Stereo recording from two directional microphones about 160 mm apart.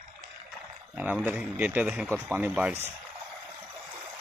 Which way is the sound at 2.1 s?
5° left (ahead or behind).